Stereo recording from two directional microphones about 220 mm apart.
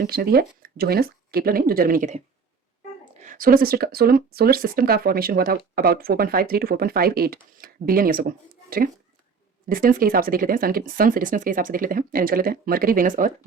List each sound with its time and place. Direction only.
0.0 s speech: 45° right (ahead or behind)
9.6 s speech: 40° right (ahead or behind)